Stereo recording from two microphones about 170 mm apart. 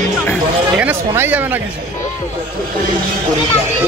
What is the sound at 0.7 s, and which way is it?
Speech, 10° right (ahead or behind).